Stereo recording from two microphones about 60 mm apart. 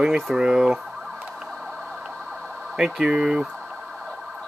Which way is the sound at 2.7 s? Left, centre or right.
Centre.